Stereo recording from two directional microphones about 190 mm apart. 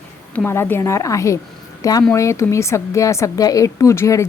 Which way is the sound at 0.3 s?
10° left (ahead or behind).